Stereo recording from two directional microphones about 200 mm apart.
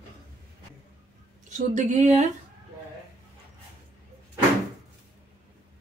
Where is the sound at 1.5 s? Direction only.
35° right (ahead or behind).